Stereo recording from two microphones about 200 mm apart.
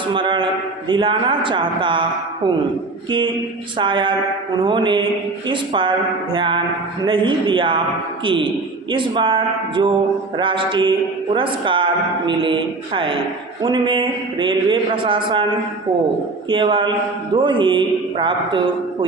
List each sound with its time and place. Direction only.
0.1 s speech: 25° right (ahead or behind)
3.8 s speech: 25° right (ahead or behind)
16.5 s speech: 25° right (ahead or behind)